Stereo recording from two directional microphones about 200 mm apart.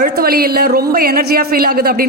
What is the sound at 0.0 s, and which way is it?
Speech, 50° right (ahead or behind).